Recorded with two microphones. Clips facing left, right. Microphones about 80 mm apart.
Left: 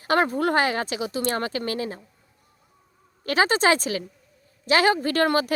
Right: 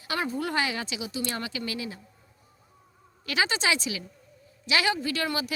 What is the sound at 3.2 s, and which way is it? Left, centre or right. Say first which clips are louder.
A woman's voice: left 7 dB; left.